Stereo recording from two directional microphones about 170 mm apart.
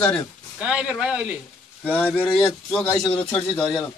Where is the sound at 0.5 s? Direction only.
5° right (ahead or behind).